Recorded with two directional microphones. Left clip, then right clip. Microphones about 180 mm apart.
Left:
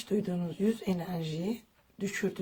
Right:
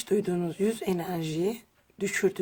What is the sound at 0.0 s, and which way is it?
Speech, 45° right (ahead or behind).